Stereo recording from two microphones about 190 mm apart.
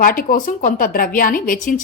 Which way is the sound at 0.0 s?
50° left (ahead or behind).